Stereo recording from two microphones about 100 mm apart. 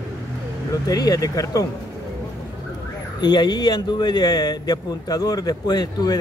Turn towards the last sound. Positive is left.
turn(degrees=40)  # may be behind; listen again after turning